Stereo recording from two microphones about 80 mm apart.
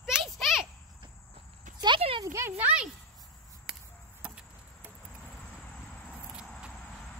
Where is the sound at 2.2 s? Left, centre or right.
Right.